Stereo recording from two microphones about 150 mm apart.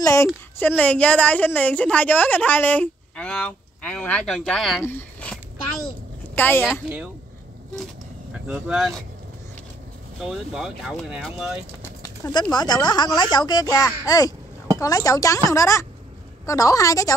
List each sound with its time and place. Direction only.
0.0 s a woman's voice: 20° left (ahead or behind); by 4.8 s centre (ahead or behind)
4.8 s a sound: 10° left (ahead or behind)
6.3 s a woman's voice: 10° left (ahead or behind)
8.5 s speech: 5° right (ahead or behind)
10.2 s speech: 5° right (ahead or behind)
12.0 s a sound: 25° left (ahead or behind)
12.5 s speech: 30° left (ahead or behind)